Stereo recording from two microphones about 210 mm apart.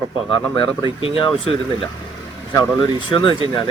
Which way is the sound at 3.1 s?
25° left (ahead or behind).